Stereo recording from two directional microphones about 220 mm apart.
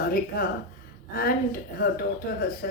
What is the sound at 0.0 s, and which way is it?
Speech, 45° left (ahead or behind).